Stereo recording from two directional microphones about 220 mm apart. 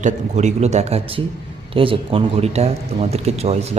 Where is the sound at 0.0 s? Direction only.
30° right (ahead or behind).